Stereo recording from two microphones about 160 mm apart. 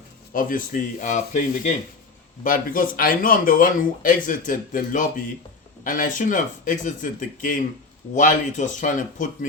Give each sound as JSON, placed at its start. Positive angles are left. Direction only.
{"t": 0.3, "sound": "speech", "side_deg": 55}